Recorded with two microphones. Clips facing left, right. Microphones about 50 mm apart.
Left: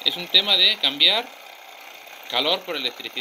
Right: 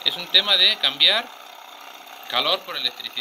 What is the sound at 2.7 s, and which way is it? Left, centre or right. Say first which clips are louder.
Speech: left 1 dB; left.